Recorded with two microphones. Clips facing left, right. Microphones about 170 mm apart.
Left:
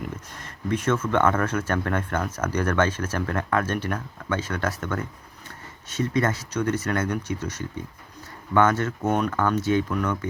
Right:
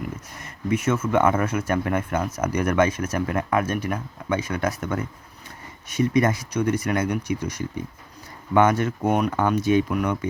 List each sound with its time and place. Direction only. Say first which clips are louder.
0.3 s speech: right 3 dB; 10° right (ahead or behind)